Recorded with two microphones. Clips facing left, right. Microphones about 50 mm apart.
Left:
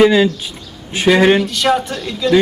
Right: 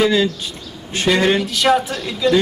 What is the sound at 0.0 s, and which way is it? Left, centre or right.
Speech, centre.